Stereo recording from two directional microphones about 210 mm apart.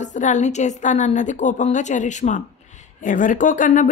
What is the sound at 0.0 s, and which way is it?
Speech, 35° left (ahead or behind).